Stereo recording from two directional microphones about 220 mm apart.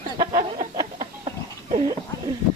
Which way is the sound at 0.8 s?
20° right (ahead or behind).